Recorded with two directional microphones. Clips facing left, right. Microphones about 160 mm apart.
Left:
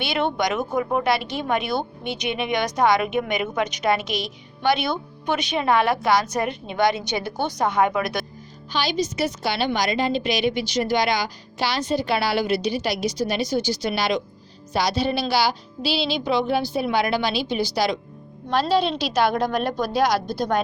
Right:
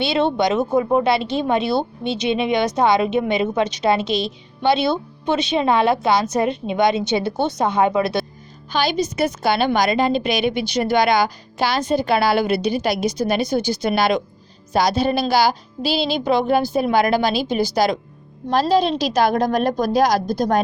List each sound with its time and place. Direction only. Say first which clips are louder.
0.0 s speech: right 5 dB; 25° right (ahead or behind)
8.7 s a woman's voice: right 4 dB; 50° right (ahead or behind)